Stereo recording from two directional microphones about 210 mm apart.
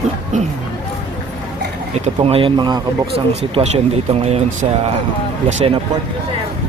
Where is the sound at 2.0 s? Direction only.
30° right (ahead or behind).